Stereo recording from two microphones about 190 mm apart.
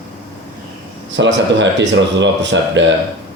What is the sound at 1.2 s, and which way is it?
Speech, 70° right (ahead or behind).